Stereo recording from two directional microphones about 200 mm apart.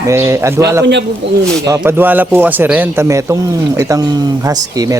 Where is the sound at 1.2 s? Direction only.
60° right (ahead or behind).